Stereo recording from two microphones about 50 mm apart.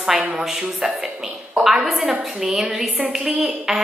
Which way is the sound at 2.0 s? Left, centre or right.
Centre.